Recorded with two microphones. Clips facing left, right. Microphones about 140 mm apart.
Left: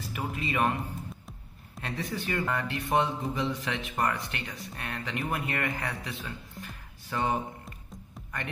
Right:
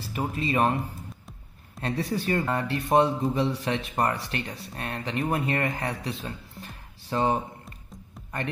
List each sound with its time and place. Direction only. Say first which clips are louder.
0.0 s speech: right 5 dB; 30° right (ahead or behind)
1.8 s speech: right 6 dB; 35° right (ahead or behind)